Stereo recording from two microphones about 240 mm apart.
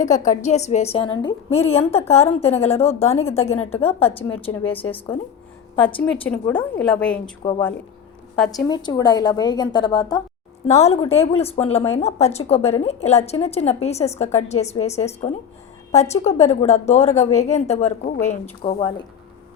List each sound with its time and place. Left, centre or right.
0.3 s a woman's voice: left
6.2 s a woman's voice: centre
8.6 s a woman's voice: centre